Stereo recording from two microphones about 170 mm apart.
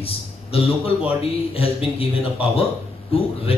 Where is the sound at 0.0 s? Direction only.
35° left (ahead or behind).